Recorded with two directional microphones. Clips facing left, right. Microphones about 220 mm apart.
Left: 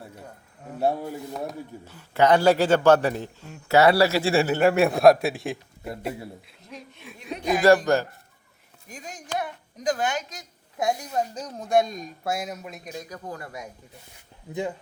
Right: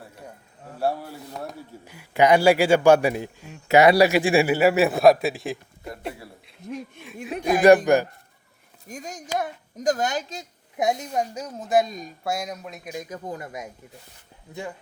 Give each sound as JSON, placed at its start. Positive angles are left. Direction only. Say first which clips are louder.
{"t": 0.8, "sound": "a man's voice", "louder": "left 1 dB", "side_deg": 20}
{"t": 1.9, "sound": "a woman's voice", "louder": "right 1 dB", "side_deg": -10}
{"t": 6.7, "sound": "speech", "louder": "right 8 dB", "side_deg": -50}
{"t": 7.9, "sound": "a woman's voice", "louder": "right 3 dB", "side_deg": -15}
{"t": 8.9, "sound": "a woman's voice", "louder": "right 3 dB", "side_deg": -45}
{"t": 12.9, "sound": "speech", "louder": "right 4 dB", "side_deg": -20}